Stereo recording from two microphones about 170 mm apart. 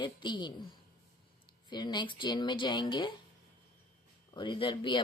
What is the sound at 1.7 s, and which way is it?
Speech, 25° left (ahead or behind).